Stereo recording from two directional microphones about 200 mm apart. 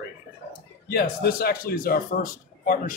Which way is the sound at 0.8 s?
50° left (ahead or behind).